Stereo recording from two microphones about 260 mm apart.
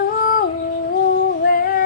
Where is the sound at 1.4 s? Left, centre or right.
Left.